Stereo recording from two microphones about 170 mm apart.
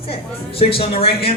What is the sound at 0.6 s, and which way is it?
Speech, 35° left (ahead or behind).